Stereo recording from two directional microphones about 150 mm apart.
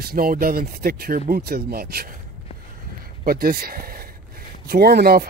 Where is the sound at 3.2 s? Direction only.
80° right.